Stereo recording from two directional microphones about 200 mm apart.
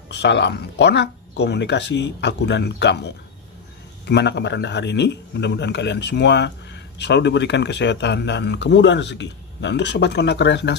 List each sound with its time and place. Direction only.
0.1 s a man's voice: 60° left (ahead or behind)